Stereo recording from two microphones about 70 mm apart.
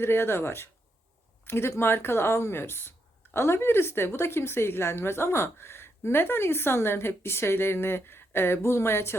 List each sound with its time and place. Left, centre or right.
0.0 s a woman's voice: left